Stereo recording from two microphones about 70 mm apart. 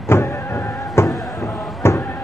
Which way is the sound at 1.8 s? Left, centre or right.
Left.